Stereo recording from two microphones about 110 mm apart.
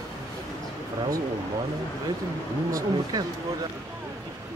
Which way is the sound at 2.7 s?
35° right (ahead or behind).